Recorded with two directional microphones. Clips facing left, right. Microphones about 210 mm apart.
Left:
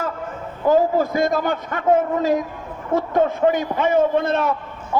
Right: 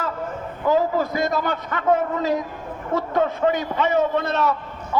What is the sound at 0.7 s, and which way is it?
A man's voice, 50° left (ahead or behind).